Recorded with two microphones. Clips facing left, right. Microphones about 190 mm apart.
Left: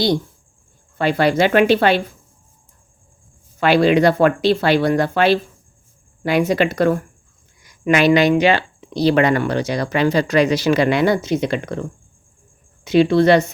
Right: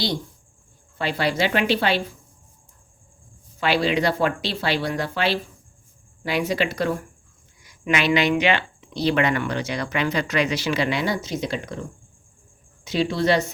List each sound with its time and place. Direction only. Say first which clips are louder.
0.9 s speech: left 7 dB; 55° left (ahead or behind)
3.6 s speech: left 8 dB; 50° left (ahead or behind)
12.8 s speech: left 9 dB; 60° left (ahead or behind)